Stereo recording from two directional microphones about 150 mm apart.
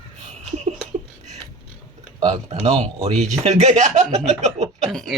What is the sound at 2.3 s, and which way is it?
A man's voice, 45° right (ahead or behind).